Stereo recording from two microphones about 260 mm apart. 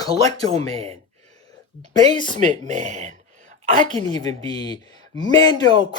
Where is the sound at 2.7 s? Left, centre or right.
Right.